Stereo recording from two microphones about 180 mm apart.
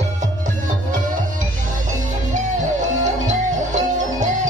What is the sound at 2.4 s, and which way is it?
Music, 45° right (ahead or behind).